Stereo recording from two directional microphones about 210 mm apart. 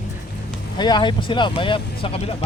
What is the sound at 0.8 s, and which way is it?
Speech, 20° left (ahead or behind).